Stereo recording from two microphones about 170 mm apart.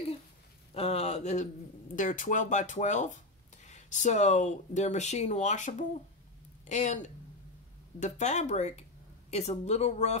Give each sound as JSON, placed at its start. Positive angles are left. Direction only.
{"t": 0.7, "sound": "speech", "side_deg": 35}